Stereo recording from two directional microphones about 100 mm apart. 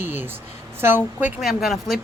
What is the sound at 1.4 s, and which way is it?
Speech, centre (ahead or behind).